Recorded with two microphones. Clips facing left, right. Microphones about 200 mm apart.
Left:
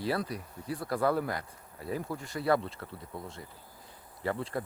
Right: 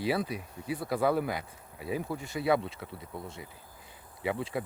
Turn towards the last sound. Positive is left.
turn(degrees=-5)  # may be behind; listen again after turning